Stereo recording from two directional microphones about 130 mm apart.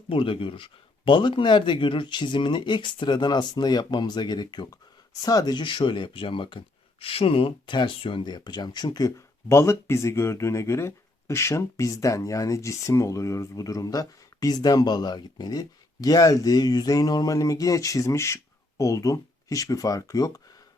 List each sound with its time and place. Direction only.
0.1 s speech: 45° left (ahead or behind); by 20.4 s 30° left (ahead or behind)